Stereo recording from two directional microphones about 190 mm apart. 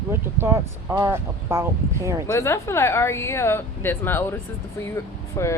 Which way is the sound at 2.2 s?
15° left (ahead or behind).